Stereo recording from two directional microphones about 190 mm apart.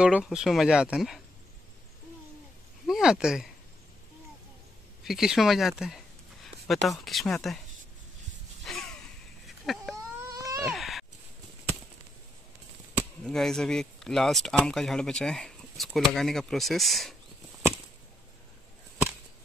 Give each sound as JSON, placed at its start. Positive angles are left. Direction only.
{"t": 0.0, "sound": "speech", "side_deg": -5}
{"t": 2.9, "sound": "speech", "side_deg": -5}
{"t": 5.0, "sound": "speech", "side_deg": 0}
{"t": 8.6, "sound": "a sound", "side_deg": 5}
{"t": 10.3, "sound": "baby cry", "side_deg": -20}
{"t": 10.7, "sound": "a sound", "side_deg": 0}
{"t": 13.2, "sound": "speech", "side_deg": 0}